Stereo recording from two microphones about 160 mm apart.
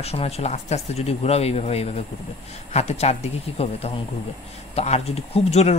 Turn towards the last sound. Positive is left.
turn(degrees=40)  # may be behind; listen again after turning